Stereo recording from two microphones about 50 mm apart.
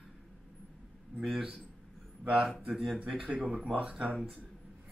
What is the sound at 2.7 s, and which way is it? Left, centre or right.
Speech, centre.